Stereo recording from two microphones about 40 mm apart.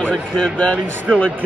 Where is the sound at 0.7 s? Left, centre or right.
Left.